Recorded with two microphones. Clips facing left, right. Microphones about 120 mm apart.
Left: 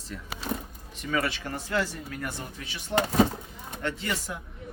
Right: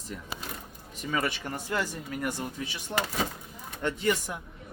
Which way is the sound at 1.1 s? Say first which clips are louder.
Left 2 dB; 15° right (ahead or behind).